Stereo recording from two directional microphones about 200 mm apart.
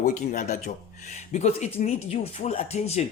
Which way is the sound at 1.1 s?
35° left (ahead or behind).